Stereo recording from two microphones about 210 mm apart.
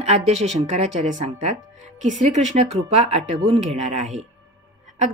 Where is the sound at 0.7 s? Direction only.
35° right (ahead or behind).